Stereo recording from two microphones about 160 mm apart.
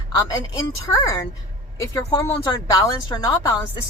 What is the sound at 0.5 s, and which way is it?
Speech, 20° left (ahead or behind).